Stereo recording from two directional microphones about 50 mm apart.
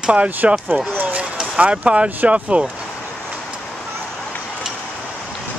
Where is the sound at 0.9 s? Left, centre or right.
Right.